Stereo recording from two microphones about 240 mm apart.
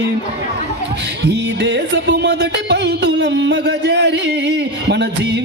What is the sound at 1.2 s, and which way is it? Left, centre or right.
Music, right.